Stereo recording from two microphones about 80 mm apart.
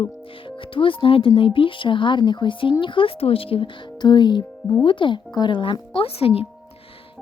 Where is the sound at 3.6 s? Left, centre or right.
Left.